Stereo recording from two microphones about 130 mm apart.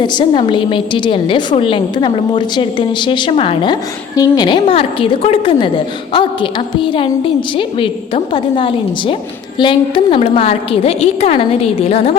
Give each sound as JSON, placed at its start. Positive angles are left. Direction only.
{"t": 0.0, "sound": "a woman's voice", "side_deg": 35}